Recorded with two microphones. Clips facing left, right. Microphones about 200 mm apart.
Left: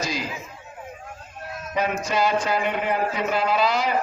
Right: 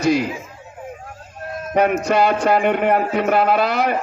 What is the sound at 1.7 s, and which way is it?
A man's voice, 60° right (ahead or behind).